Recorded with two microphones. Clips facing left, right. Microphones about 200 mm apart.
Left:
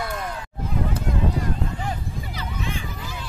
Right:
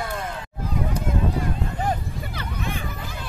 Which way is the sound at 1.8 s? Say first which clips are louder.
Right 4 dB; 50° right (ahead or behind).